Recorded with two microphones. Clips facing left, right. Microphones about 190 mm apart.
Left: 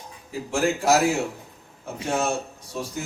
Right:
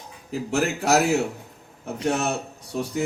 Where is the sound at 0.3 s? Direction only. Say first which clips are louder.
Even; 65° right (ahead or behind).